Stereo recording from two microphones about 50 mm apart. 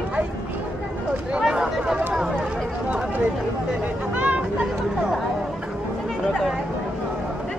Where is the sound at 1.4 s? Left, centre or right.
Centre.